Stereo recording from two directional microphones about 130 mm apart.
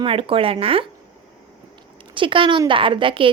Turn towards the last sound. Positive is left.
turn(degrees=-40)  # may be behind; listen again after turning